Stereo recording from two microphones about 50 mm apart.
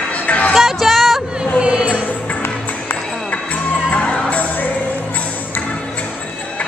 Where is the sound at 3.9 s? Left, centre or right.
Left.